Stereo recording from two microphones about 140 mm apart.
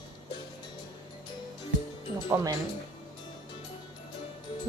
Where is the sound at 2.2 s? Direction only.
20° right (ahead or behind).